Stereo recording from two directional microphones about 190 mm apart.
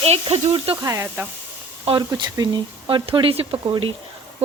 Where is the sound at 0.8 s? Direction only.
15° right (ahead or behind).